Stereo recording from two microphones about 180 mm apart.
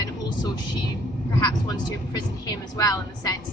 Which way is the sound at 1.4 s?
20° left (ahead or behind).